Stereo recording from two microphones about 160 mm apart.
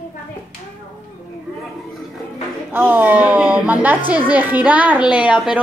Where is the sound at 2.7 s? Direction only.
15° right (ahead or behind).